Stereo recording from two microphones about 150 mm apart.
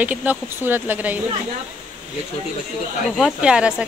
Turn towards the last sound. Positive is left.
turn(degrees=-5)  # may be behind; listen again after turning